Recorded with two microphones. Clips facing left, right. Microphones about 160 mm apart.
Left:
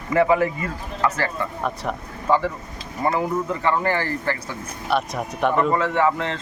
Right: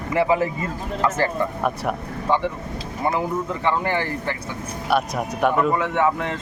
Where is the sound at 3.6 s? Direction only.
20° right (ahead or behind).